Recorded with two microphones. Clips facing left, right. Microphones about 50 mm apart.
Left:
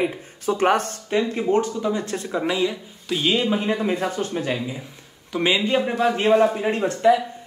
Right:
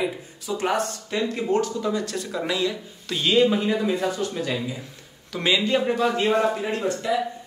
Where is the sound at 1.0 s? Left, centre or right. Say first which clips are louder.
Left 6 dB; left.